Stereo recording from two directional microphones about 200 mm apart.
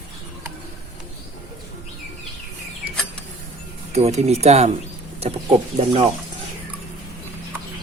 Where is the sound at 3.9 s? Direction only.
30° right (ahead or behind).